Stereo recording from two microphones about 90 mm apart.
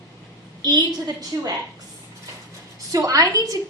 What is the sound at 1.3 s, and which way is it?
Speech, 50° right (ahead or behind).